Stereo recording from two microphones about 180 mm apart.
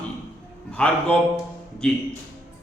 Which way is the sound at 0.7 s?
5° left (ahead or behind).